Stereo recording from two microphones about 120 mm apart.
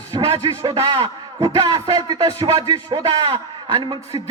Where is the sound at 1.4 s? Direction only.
35° right (ahead or behind).